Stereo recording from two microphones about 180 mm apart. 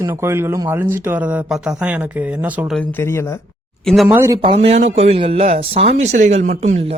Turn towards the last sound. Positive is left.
turn(degrees=-40)  # may be behind; listen again after turning